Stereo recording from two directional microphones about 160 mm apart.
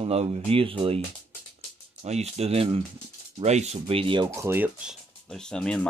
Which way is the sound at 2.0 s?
40° right (ahead or behind).